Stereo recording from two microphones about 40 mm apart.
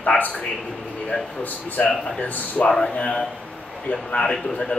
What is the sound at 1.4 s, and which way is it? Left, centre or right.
A man's voice, left.